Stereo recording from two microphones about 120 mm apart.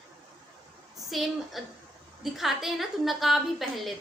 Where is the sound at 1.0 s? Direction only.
Centre (ahead or behind).